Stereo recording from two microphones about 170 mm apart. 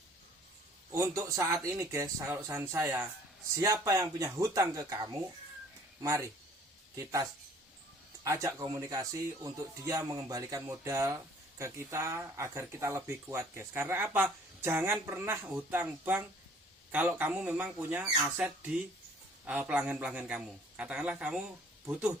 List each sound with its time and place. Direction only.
0.9 s speech: 20° right (ahead or behind)